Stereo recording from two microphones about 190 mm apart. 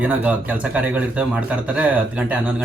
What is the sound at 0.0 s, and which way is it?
Speech, 10° right (ahead or behind).